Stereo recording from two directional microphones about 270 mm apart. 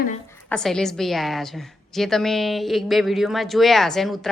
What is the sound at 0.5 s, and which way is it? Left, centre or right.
A woman's voice, centre.